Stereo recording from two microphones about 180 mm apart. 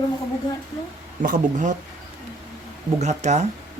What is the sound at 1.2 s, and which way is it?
Speech, 45° right (ahead or behind).